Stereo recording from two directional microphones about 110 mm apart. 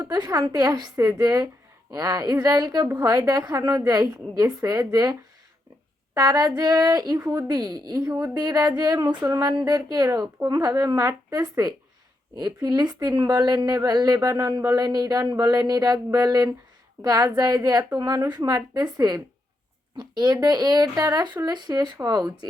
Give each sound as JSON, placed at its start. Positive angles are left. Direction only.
{"t": 0.0, "sound": "speech", "side_deg": -35}
{"t": 6.1, "sound": "speech", "side_deg": -35}
{"t": 8.0, "sound": "speech", "side_deg": -25}
{"t": 8.4, "sound": "speech", "side_deg": -35}